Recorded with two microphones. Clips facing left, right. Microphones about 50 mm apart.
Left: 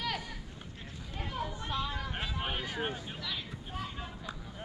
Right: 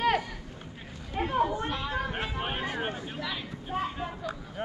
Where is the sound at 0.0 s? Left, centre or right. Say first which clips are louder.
Right 10 dB; right.